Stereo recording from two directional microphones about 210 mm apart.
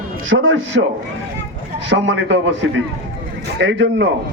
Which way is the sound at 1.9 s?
60° right (ahead or behind).